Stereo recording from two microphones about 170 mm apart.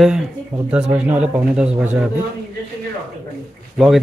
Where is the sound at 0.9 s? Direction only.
5° right (ahead or behind).